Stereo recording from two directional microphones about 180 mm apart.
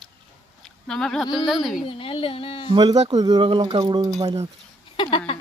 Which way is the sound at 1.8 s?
30° left (ahead or behind).